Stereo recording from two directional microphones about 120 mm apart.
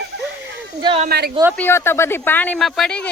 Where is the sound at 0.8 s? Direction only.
40° right (ahead or behind).